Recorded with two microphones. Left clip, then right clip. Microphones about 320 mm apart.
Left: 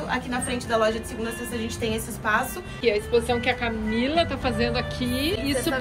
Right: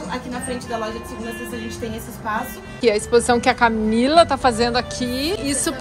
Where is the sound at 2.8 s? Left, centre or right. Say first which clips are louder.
Right 6 dB; right.